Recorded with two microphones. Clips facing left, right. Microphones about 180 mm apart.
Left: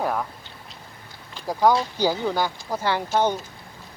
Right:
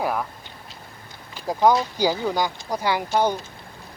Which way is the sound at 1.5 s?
20° right (ahead or behind).